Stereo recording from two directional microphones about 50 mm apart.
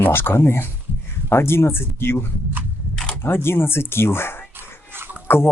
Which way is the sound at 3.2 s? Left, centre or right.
Left.